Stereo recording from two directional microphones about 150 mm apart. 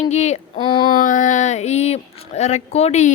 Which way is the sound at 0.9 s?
60° left (ahead or behind).